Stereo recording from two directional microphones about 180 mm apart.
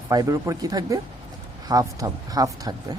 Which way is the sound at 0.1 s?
20° right (ahead or behind).